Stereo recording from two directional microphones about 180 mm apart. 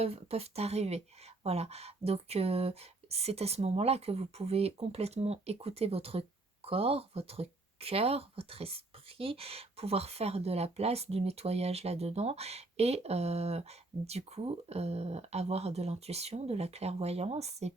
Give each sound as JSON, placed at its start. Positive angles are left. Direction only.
{"t": 0.0, "sound": "speech", "side_deg": -35}